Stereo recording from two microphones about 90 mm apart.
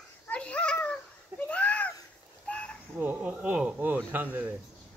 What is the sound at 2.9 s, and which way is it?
Speech, 20° right (ahead or behind).